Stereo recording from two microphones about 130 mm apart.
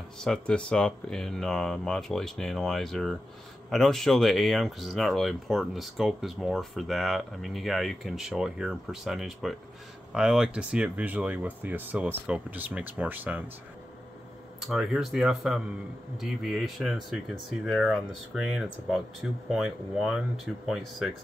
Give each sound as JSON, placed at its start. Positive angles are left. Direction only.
{"t": 0.2, "sound": "speech", "side_deg": 5}
{"t": 14.7, "sound": "speech", "side_deg": -5}